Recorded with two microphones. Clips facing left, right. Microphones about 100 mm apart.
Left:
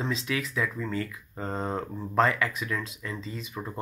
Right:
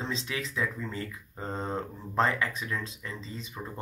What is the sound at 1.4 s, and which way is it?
Speech, 40° left (ahead or behind).